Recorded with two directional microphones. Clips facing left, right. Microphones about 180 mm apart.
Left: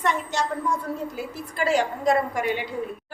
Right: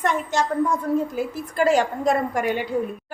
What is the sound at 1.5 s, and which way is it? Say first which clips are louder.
A woman's voice: right 4 dB; 45° right (ahead or behind).